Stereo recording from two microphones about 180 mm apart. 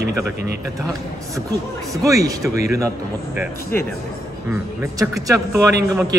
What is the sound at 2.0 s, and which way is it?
Speech, 20° right (ahead or behind).